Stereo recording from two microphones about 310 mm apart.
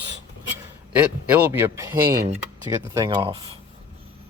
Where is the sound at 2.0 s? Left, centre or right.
Right.